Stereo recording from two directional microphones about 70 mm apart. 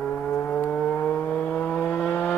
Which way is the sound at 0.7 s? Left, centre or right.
Left.